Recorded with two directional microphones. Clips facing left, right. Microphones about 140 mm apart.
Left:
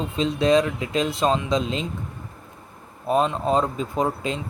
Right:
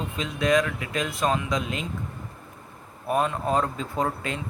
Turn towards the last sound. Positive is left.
turn(degrees=20)  # may be behind; listen again after turning